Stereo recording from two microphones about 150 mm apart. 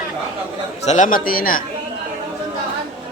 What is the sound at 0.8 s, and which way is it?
Speech, 55° left (ahead or behind).